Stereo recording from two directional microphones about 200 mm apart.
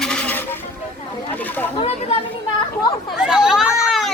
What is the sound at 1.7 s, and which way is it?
Speech, 30° left (ahead or behind).